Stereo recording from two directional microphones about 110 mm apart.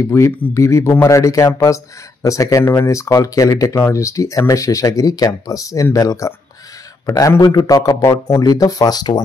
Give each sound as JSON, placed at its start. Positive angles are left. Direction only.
{"t": 0.0, "sound": "speech", "side_deg": 25}
{"t": 8.0, "sound": "speech", "side_deg": 25}